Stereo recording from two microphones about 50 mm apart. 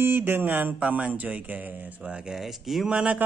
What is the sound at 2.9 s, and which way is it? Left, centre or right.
Speech, right.